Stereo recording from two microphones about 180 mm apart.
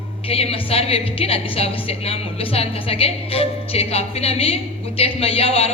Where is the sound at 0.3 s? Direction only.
35° left (ahead or behind).